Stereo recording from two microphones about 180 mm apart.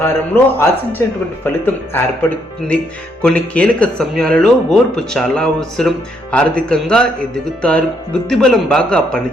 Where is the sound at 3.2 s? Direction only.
5° left (ahead or behind).